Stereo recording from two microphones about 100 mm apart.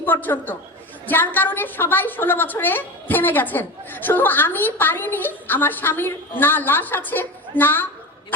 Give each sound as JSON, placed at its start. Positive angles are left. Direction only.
{"t": 0.0, "sound": "a woman's voice", "side_deg": 20}